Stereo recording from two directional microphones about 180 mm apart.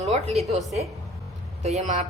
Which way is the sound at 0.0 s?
35° right (ahead or behind).